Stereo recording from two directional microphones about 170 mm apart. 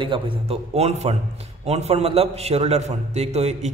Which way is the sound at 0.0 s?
30° right (ahead or behind).